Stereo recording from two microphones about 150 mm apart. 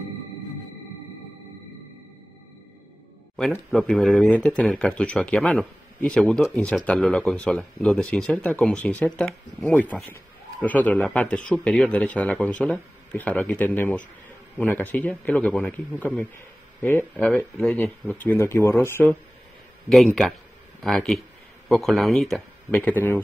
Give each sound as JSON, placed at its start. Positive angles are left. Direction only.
{"t": 3.3, "sound": "speech", "side_deg": 5}
{"t": 20.8, "sound": "speech", "side_deg": 5}